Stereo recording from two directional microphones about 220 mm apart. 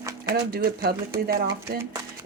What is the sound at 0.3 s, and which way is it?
Speech, 45° right (ahead or behind).